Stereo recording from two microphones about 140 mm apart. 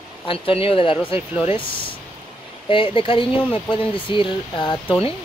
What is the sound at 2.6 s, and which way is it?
Speech, 40° left (ahead or behind).